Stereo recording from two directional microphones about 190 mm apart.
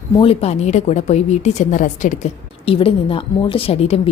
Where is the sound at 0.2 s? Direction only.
30° left (ahead or behind).